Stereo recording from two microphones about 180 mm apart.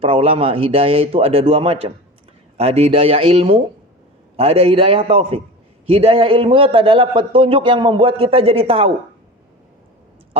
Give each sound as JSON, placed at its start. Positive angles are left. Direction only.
{"t": 0.0, "sound": "a man's voice", "side_deg": -30}